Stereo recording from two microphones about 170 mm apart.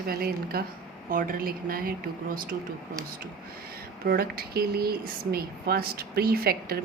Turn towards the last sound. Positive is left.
turn(degrees=-65)  # may be behind; listen again after turning